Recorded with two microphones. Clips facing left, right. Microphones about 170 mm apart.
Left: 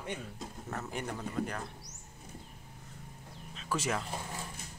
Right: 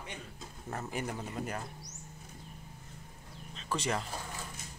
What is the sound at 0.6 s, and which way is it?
Speech, 10° right (ahead or behind).